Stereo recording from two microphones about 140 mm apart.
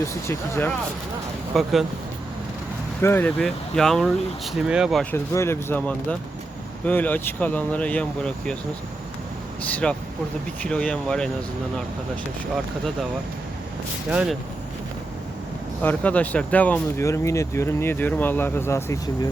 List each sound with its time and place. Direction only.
0.3 s speech: 15° left (ahead or behind)
1.5 s speech: centre (ahead or behind)
3.0 s speech: 15° left (ahead or behind)
3.4 s speech: 5° left (ahead or behind)
5.1 s speech: 20° left (ahead or behind)
9.8 s speech: 5° left (ahead or behind)
12.5 s speech: centre (ahead or behind)
14.1 s speech: 10° right (ahead or behind)
15.8 s speech: 10° left (ahead or behind)
17.1 s speech: 20° left (ahead or behind)